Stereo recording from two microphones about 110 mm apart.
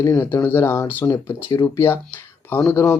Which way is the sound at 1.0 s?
35° left (ahead or behind).